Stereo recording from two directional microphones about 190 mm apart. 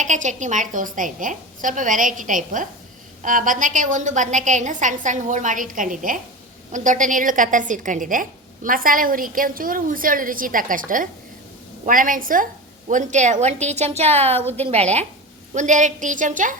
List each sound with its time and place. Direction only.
0.0 s a woman's voice: 40° right (ahead or behind)